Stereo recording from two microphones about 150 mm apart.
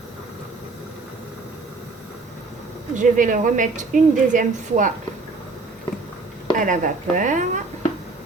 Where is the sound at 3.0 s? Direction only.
60° right (ahead or behind).